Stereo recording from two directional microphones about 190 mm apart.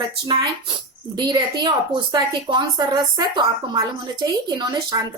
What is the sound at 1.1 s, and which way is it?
A woman's voice, 20° right (ahead or behind).